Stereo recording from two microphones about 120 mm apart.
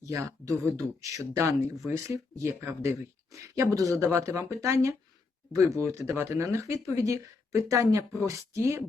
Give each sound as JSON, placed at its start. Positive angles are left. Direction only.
{"t": 0.0, "sound": "speech", "side_deg": -25}